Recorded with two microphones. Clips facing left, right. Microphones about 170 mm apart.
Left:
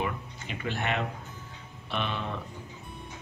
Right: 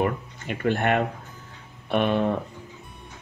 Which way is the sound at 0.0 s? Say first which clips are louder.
Right 7 dB; 55° right (ahead or behind).